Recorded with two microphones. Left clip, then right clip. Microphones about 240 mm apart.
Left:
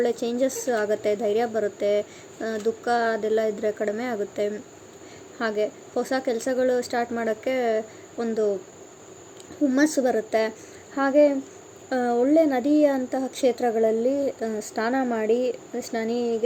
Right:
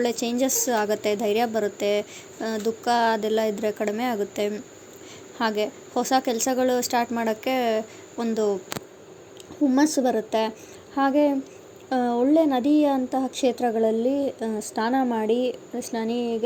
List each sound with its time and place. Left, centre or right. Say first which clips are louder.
0.0 s a woman's voice: left 1 dB; centre
9.7 s a woman's voice: even; centre